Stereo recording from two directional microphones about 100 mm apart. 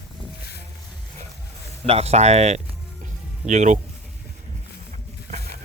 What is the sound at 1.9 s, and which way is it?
Speech, 90° right.